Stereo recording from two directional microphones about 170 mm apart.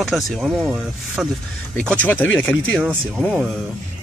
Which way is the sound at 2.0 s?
10° left (ahead or behind).